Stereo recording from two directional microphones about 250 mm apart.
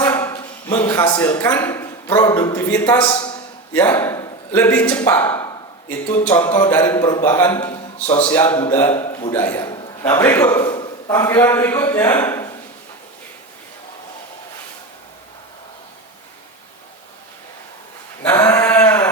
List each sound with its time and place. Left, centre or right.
0.0 s a man's voice: centre
6.1 s a sound: centre
6.5 s a man's voice: centre
8.0 s a man's voice: left
18.2 s sheep: centre